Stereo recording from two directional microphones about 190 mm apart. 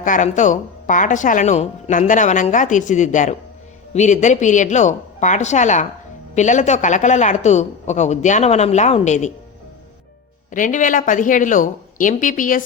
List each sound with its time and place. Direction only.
0.0 s speech: 40° left (ahead or behind)
10.5 s a woman's voice: 45° left (ahead or behind)